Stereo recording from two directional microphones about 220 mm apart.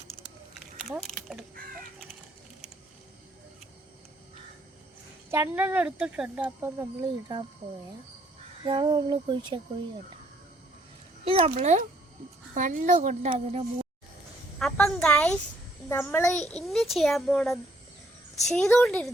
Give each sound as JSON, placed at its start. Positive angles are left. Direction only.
{"t": 0.8, "sound": "speech", "side_deg": 0}
{"t": 5.3, "sound": "speech", "side_deg": -10}
{"t": 8.6, "sound": "a sound", "side_deg": -20}
{"t": 11.3, "sound": "a sound", "side_deg": -25}
{"t": 12.5, "sound": "speech", "side_deg": -35}
{"t": 14.6, "sound": "a child's voice", "side_deg": 0}